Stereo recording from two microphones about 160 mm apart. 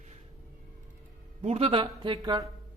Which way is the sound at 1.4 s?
40° right (ahead or behind).